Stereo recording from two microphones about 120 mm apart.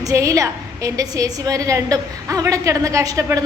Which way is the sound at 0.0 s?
30° right (ahead or behind).